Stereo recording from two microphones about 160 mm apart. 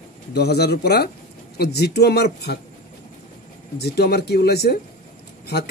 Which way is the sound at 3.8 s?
90° left.